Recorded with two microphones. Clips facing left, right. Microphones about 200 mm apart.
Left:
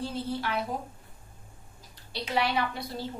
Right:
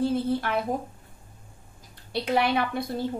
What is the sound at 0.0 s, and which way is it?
Speech, 55° right (ahead or behind).